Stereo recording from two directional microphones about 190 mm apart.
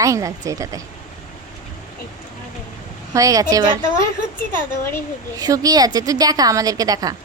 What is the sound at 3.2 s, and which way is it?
Speech, 20° right (ahead or behind).